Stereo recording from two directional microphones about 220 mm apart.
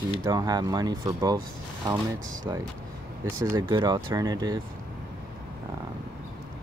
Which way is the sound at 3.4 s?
20° right (ahead or behind).